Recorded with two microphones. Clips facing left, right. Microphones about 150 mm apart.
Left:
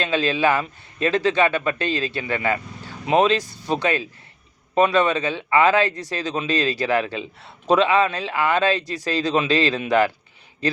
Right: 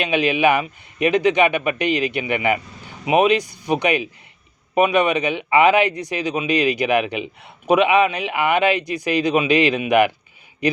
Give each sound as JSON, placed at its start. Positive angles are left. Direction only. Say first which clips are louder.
{"t": 0.0, "sound": "a man's voice", "louder": "right 3 dB", "side_deg": -15}